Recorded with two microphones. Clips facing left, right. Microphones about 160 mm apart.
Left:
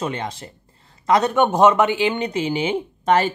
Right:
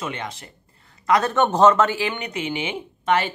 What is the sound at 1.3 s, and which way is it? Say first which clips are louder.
Speech: even; 10° left (ahead or behind).